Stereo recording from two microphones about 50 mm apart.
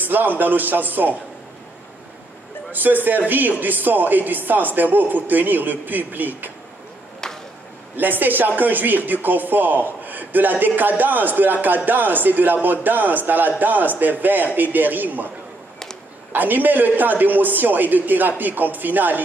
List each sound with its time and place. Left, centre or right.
0.0 s speech: right
2.7 s speech: right
7.9 s speech: right